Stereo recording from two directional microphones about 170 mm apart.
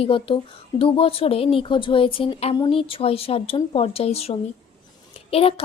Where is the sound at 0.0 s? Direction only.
30° left (ahead or behind).